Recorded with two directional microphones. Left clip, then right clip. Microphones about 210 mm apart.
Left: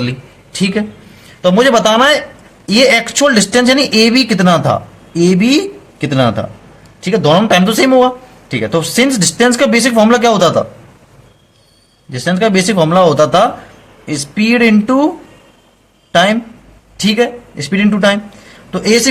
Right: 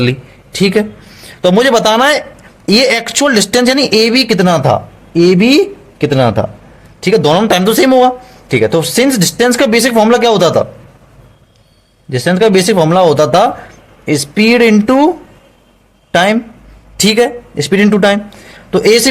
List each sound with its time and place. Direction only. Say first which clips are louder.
0.0 s speech: right 6 dB; 35° right (ahead or behind)
12.1 s speech: right 3 dB; 35° right (ahead or behind)
16.1 s speech: even; 35° right (ahead or behind)